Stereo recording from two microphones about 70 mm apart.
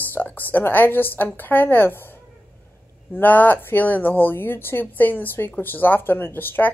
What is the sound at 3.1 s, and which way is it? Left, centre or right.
Speech, left.